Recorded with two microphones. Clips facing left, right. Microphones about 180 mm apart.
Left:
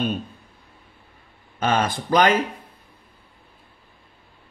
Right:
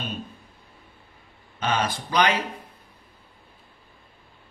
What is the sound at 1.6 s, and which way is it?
Speech, 50° left (ahead or behind).